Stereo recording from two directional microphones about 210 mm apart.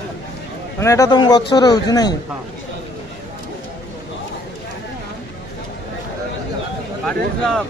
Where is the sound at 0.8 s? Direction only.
15° left (ahead or behind).